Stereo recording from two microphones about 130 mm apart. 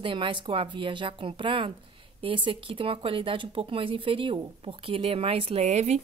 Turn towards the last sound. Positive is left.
turn(degrees=-60)  # may be behind; listen again after turning